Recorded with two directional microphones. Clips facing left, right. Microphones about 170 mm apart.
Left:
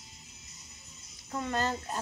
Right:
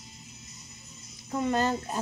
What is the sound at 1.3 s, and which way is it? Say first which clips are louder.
Speech: right 5 dB; 20° right (ahead or behind).